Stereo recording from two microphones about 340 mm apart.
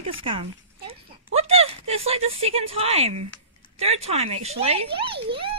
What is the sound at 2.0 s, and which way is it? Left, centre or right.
Speech, centre.